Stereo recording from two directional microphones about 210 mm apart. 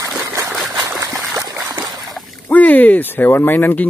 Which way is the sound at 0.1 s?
10° right (ahead or behind).